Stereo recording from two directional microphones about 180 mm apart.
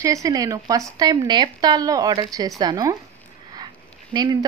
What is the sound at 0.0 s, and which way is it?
Speech, 20° right (ahead or behind).